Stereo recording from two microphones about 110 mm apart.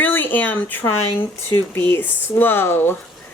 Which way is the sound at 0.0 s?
20° left (ahead or behind).